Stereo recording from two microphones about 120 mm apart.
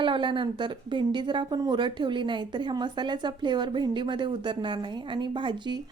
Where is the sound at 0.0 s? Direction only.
40° right (ahead or behind).